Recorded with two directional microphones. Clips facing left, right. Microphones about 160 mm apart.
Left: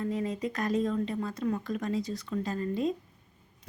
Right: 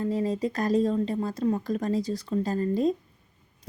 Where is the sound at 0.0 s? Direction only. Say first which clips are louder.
Right 5 dB; 35° right (ahead or behind).